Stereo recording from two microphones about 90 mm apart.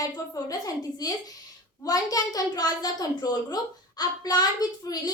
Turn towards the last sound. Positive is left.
turn(degrees=45)  # may be behind; listen again after turning